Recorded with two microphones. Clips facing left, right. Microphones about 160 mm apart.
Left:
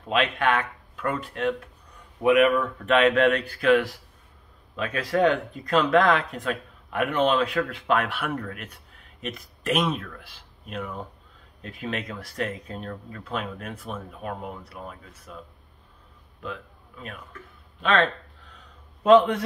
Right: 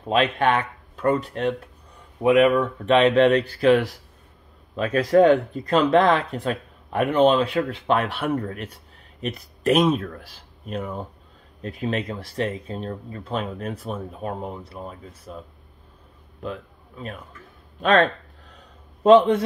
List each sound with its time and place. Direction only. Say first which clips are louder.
0.0 s speech: right 4 dB; 35° right (ahead or behind)
2.2 s speech: right 2 dB; 25° right (ahead or behind)
17.7 s a man's voice: right 5 dB; 40° right (ahead or behind)
19.0 s a man's voice: right 3 dB; 30° right (ahead or behind)